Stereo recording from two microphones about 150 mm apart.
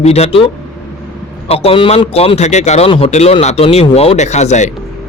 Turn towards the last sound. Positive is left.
turn(degrees=50)  # may be behind; listen again after turning